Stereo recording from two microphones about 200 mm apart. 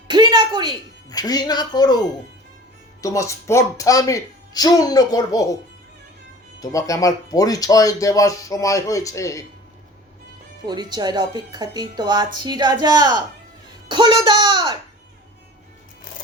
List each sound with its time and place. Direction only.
0.1 s a sound: 25° right (ahead or behind)
1.1 s speech: 20° left (ahead or behind)
6.6 s speech: 15° left (ahead or behind)
10.7 s speech: 20° right (ahead or behind)